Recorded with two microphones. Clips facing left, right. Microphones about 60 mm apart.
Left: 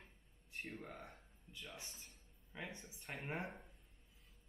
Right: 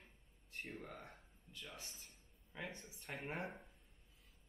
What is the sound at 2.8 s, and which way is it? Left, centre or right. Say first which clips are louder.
Speech: right 1 dB; centre.